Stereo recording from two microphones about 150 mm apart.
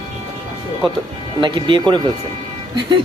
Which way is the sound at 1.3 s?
35° right (ahead or behind).